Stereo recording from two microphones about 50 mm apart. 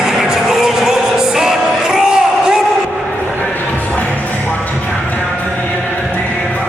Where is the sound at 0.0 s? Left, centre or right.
Centre.